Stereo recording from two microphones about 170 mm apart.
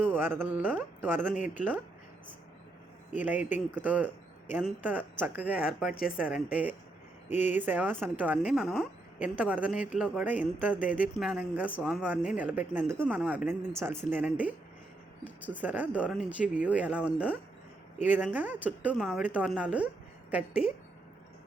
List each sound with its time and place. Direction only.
0.0 s a woman's voice: 10° right (ahead or behind)
3.2 s a woman's voice: 10° right (ahead or behind)
5.9 s speech: 60° left (ahead or behind)
6.1 s a woman's voice: 5° right (ahead or behind)
15.6 s a woman's voice: 10° right (ahead or behind)